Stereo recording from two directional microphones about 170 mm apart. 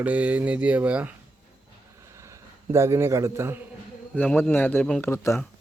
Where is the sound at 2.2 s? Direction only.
15° right (ahead or behind).